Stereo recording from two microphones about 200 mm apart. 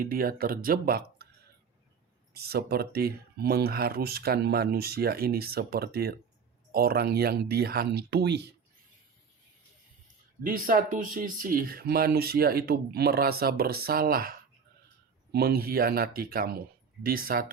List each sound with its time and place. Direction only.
0.1 s speech: 45° right (ahead or behind)
2.3 s speech: 50° right (ahead or behind)
10.4 s speech: 45° right (ahead or behind)